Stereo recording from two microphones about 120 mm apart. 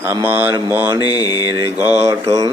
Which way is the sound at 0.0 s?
20° right (ahead or behind).